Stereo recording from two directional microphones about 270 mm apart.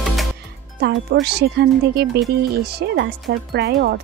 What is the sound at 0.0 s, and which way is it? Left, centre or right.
Music, centre.